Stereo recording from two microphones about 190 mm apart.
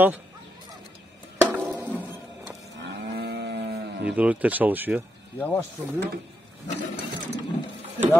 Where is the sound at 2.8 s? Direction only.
60° right (ahead or behind).